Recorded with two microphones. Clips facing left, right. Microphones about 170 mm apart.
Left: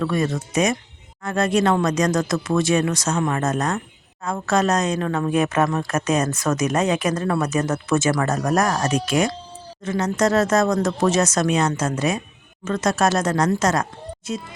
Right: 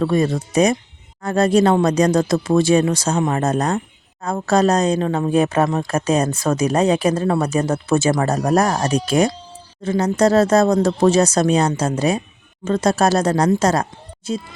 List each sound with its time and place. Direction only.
0.0 s speech: 30° right (ahead or behind)